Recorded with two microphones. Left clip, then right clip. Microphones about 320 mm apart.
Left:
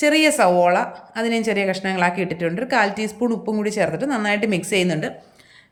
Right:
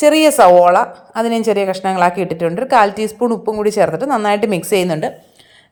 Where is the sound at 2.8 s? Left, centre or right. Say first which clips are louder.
Right 5 dB; centre.